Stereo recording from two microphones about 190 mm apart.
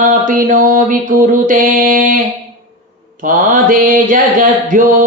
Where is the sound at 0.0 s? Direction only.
45° right (ahead or behind).